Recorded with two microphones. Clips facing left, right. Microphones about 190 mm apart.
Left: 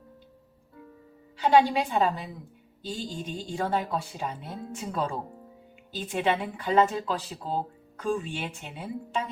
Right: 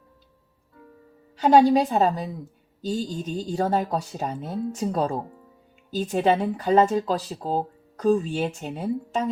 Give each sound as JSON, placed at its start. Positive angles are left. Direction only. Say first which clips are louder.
{"t": 1.4, "sound": "a woman's voice", "louder": "right 5 dB", "side_deg": -40}